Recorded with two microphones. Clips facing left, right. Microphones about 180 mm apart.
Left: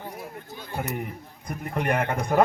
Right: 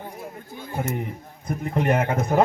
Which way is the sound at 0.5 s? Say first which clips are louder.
Right 3 dB; 20° right (ahead or behind).